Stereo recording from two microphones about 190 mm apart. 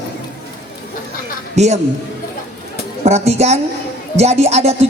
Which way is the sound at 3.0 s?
35° right (ahead or behind).